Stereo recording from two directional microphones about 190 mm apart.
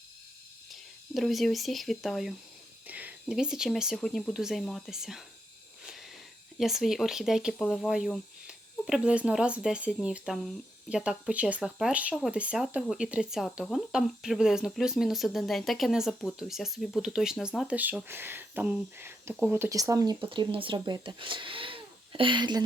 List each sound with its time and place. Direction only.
0.7 s speech: centre (ahead or behind)
6.6 s speech: centre (ahead or behind); by 22.6 s 25° right (ahead or behind)